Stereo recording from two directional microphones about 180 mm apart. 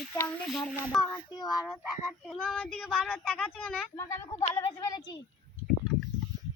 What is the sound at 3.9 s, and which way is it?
A child's voice, 15° left (ahead or behind).